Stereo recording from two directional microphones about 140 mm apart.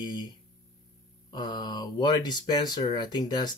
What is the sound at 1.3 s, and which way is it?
Speech, 30° left (ahead or behind).